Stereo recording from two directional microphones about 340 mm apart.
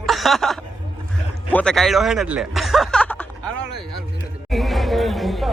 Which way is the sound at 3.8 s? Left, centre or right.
Centre.